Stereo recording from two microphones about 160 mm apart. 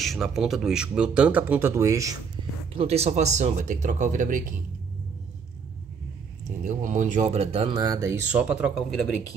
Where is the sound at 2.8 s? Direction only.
40° right (ahead or behind).